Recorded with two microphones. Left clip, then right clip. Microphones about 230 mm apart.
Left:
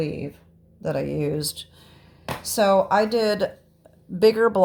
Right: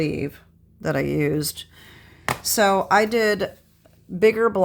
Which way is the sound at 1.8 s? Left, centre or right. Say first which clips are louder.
Right 5 dB; right.